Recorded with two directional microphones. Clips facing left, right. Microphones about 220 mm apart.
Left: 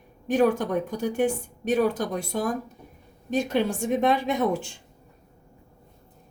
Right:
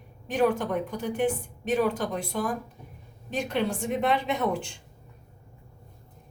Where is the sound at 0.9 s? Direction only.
45° left (ahead or behind).